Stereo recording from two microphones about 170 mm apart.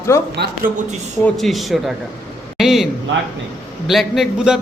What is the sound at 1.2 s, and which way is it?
A man's voice, centre (ahead or behind).